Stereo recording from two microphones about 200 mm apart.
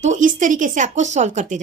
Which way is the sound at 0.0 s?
40° right (ahead or behind).